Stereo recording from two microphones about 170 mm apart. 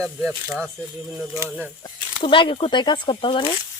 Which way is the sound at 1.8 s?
30° left (ahead or behind).